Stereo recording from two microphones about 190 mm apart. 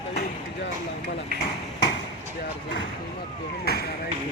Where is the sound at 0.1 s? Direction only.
55° left (ahead or behind).